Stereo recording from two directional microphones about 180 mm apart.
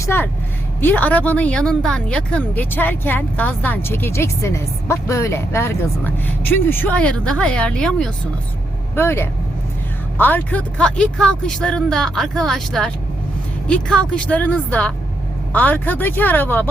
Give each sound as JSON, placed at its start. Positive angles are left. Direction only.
{"t": 0.0, "sound": "speech", "side_deg": 15}
{"t": 9.0, "sound": "speech", "side_deg": 15}